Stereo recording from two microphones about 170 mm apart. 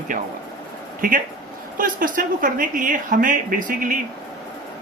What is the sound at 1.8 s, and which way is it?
Speech, 55° right (ahead or behind).